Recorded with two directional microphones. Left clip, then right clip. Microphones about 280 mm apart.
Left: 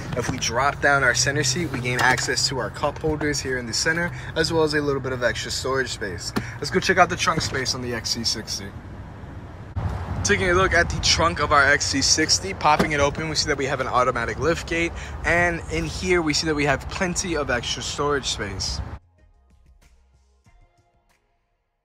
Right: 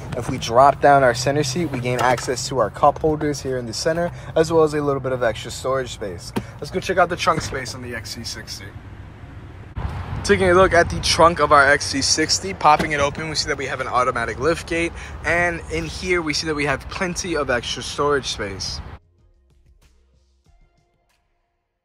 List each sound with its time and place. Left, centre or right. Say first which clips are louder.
0.2 s speech: right 8 dB; centre
3.4 s speech: right 2 dB; right
4.2 s speech: right 5 dB; centre
7.5 s speech: left 3 dB; centre
10.4 s speech: right 6 dB; centre